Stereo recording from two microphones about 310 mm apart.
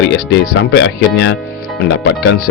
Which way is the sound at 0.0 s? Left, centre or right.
Left.